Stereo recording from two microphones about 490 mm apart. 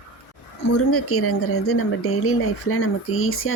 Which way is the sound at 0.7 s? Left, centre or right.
Left.